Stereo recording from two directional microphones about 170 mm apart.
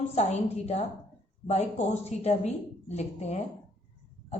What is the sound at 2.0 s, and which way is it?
A woman's voice, 40° left (ahead or behind).